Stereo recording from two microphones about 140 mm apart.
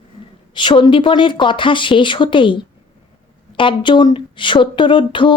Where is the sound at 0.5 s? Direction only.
35° left (ahead or behind).